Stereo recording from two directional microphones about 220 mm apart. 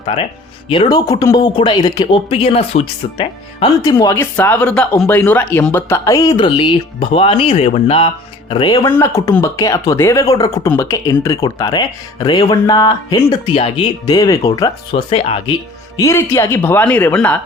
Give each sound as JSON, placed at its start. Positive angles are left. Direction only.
{"t": 0.0, "sound": "speech", "side_deg": 25}
{"t": 15.1, "sound": "speech", "side_deg": 25}
{"t": 16.0, "sound": "speech", "side_deg": 10}